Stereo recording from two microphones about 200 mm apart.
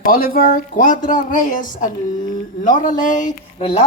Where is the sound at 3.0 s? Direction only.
40° left (ahead or behind).